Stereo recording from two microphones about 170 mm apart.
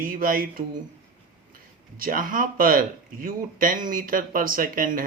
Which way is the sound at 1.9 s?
55° right (ahead or behind).